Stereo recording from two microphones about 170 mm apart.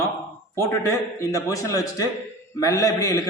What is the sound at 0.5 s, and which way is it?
A man's voice, 15° left (ahead or behind).